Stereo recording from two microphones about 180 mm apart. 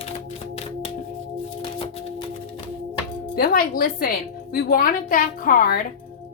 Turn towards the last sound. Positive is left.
turn(degrees=50)  # may be behind; listen again after turning